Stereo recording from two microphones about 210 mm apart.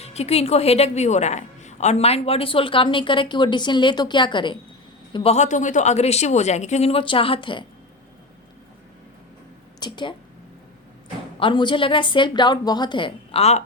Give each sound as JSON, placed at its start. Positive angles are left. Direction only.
{"t": 0.0, "sound": "a woman's voice", "side_deg": 30}
{"t": 9.8, "sound": "a woman's voice", "side_deg": 20}
{"t": 11.3, "sound": "a woman's voice", "side_deg": 25}